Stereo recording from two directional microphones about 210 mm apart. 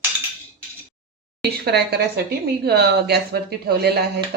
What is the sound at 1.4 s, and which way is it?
Speech, 50° right (ahead or behind).